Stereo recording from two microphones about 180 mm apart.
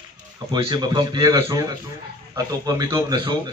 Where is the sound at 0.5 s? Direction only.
25° right (ahead or behind).